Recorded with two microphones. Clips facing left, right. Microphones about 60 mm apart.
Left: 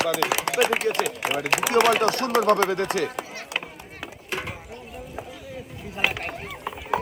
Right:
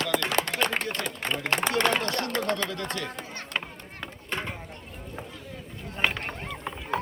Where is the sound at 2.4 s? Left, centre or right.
Left.